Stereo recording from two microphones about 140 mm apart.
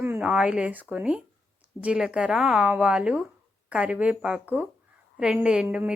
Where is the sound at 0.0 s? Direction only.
10° right (ahead or behind).